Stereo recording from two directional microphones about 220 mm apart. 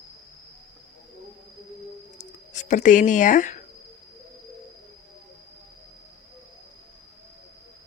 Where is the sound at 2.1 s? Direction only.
35° left (ahead or behind).